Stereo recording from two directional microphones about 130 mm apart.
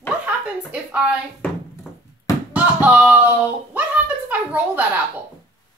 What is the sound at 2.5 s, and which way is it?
Speech, 10° right (ahead or behind).